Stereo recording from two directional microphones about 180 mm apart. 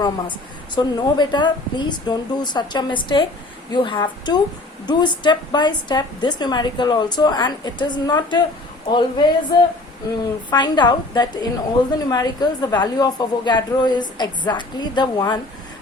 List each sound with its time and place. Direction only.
0.0 s a woman's voice: 25° left (ahead or behind)
10.5 s a woman's voice: 25° left (ahead or behind)